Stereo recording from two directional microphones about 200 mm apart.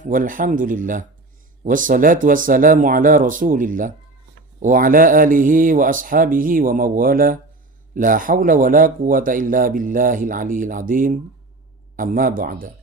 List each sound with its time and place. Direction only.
0.0 s speech: 40° right (ahead or behind)